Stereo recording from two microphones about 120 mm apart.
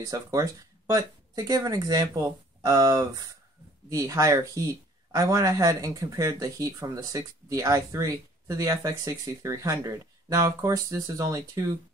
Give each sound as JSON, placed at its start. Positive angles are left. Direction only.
{"t": 0.0, "sound": "speech", "side_deg": -30}